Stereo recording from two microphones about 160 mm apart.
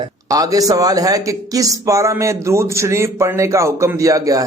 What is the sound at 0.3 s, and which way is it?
A man's voice, 20° right (ahead or behind).